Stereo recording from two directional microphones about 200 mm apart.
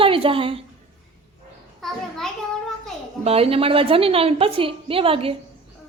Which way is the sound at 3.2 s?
30° right (ahead or behind).